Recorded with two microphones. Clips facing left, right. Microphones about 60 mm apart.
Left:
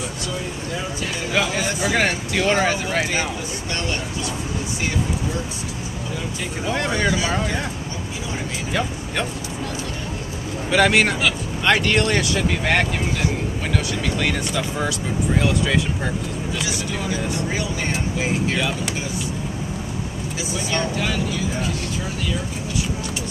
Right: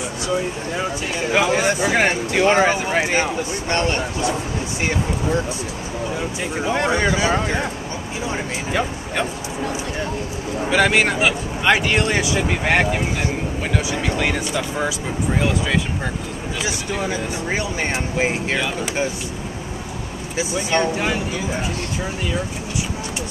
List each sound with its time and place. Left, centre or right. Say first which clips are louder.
1.3 s speech: right 5 dB; right
3.7 s speech: right 6 dB; right
6.6 s speech: right 3 dB; centre
8.7 s speech: right 2 dB; centre
10.7 s speech: even; centre
14.0 s speech: right 1 dB; centre
17.0 s speech: even; right
20.7 s speech: right 4 dB; right